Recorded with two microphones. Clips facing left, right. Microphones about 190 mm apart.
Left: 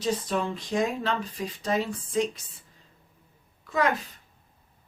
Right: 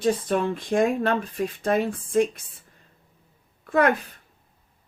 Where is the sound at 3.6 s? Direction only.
55° right (ahead or behind).